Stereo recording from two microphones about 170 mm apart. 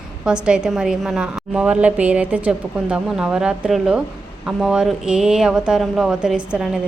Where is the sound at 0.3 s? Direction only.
5° right (ahead or behind).